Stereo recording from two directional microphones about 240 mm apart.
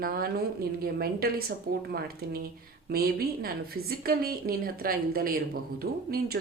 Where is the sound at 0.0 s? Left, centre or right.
Right.